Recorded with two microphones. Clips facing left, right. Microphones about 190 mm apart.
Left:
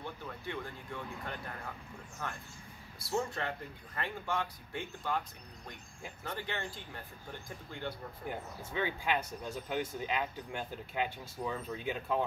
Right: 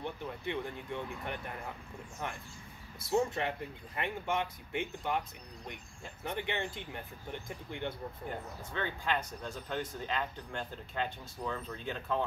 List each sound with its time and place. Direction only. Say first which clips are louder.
0.0 s speech: right 4 dB; 20° right (ahead or behind)
6.2 s speech: right 4 dB; 20° right (ahead or behind)
8.3 s speech: even; 10° left (ahead or behind)